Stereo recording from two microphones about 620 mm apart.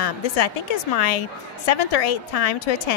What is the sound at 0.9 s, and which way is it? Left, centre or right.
A woman's voice, left.